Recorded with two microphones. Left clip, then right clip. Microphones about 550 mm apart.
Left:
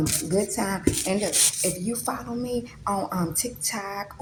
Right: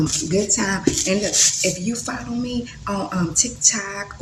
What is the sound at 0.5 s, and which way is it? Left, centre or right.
Speech, left.